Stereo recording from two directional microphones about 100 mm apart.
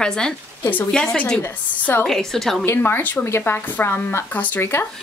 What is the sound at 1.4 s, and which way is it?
Speech, 20° left (ahead or behind).